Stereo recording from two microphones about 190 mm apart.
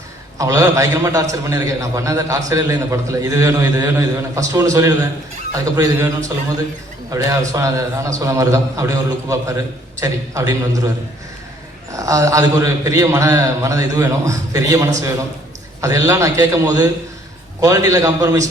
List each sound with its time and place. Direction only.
0.3 s a man's voice: 15° right (ahead or behind)
11.9 s a man's voice: 15° right (ahead or behind)